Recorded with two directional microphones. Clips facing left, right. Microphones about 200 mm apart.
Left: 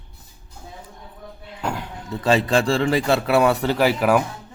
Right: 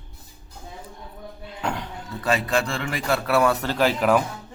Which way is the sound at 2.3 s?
30° left (ahead or behind).